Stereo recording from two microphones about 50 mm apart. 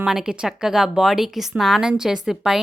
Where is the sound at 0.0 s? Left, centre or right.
Centre.